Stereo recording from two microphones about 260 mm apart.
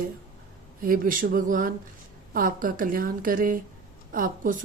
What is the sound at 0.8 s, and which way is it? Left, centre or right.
Speech, right.